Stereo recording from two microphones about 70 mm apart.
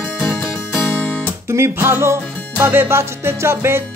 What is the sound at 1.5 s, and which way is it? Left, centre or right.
Music, right.